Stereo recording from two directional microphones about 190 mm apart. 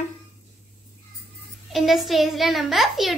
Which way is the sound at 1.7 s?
Centre (ahead or behind).